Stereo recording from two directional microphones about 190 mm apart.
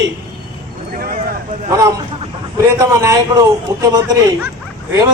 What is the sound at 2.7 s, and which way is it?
A man's voice, 20° right (ahead or behind).